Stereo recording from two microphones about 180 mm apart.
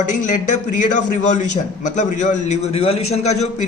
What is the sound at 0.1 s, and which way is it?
A man's voice, 45° left (ahead or behind).